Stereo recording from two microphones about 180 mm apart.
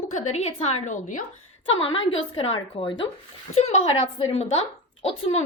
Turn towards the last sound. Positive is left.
turn(degrees=35)  # may be behind; listen again after turning